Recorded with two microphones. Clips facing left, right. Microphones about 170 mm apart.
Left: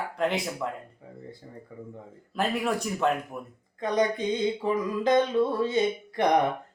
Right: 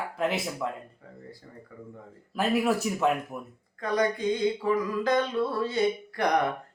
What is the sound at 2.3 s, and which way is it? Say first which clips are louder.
Speech: right 2 dB; 5° right (ahead or behind).